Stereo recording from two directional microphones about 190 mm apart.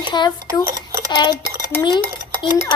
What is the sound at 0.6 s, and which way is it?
Dishes, 15° right (ahead or behind).